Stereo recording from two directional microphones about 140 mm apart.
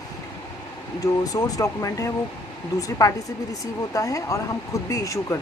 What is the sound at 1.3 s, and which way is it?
Speech, 25° left (ahead or behind).